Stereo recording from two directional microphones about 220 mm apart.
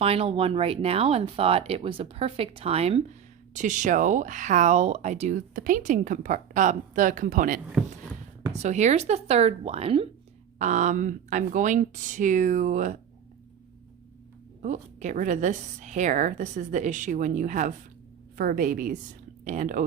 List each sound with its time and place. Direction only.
0.0 s speech: 25° right (ahead or behind)
14.6 s speech: 35° right (ahead or behind)